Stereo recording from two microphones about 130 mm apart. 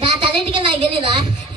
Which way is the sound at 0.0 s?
40° right (ahead or behind).